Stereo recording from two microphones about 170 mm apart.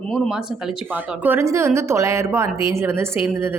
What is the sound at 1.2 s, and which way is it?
A woman's voice, 15° right (ahead or behind).